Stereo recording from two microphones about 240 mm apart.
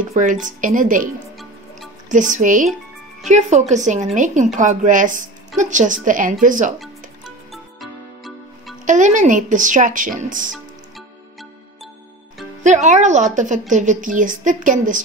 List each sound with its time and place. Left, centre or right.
0.1 s a woman's voice: right
2.0 s a woman's voice: right
6.8 s music: centre
8.8 s a woman's voice: right
12.6 s a woman's voice: right